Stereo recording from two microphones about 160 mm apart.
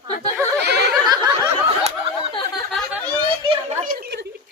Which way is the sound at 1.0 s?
25° right (ahead or behind).